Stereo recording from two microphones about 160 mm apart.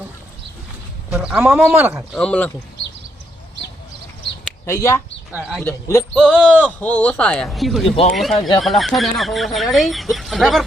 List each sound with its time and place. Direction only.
1.1 s speech: 5° right (ahead or behind)
2.1 s speech: 5° left (ahead or behind)
4.6 s speech: 20° left (ahead or behind)
5.3 s speech: 5° right (ahead or behind)
5.6 s a man's voice: 20° left (ahead or behind)
6.1 s speech: 5° left (ahead or behind)
7.9 s speech: 35° left (ahead or behind)
8.1 s speech: centre (ahead or behind)